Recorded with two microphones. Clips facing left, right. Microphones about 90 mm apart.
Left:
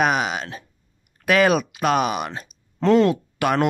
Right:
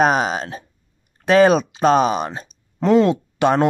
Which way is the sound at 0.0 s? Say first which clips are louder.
Right 4 dB; 35° right (ahead or behind).